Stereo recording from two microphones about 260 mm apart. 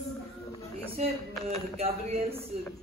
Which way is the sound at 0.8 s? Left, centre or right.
Right.